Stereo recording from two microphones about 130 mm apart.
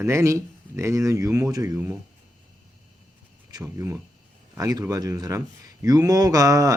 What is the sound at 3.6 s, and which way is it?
Speech, 20° right (ahead or behind).